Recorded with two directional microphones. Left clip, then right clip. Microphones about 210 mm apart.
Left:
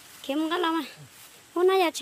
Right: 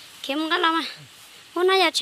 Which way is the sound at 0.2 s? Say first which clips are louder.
Right 5 dB; 10° left (ahead or behind).